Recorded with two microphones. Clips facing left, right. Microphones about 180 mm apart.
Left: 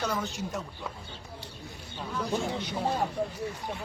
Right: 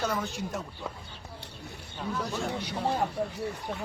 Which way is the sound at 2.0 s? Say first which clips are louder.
Left 1 dB; centre (ahead or behind).